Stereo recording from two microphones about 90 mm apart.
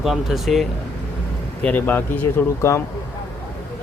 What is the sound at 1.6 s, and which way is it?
Speech, 15° left (ahead or behind).